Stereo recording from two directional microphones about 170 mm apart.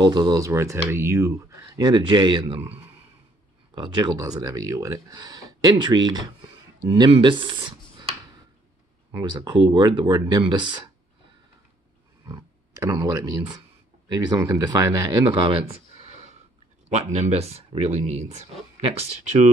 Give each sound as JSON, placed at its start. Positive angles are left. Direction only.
{"t": 0.0, "sound": "speech", "side_deg": -25}
{"t": 3.7, "sound": "speech", "side_deg": -25}
{"t": 9.1, "sound": "speech", "side_deg": -25}
{"t": 12.3, "sound": "speech", "side_deg": -20}